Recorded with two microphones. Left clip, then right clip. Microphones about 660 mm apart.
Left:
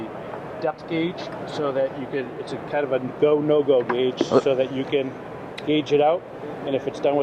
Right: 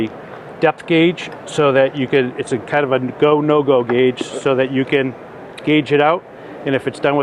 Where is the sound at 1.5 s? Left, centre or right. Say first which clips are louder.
Right 11 dB; right.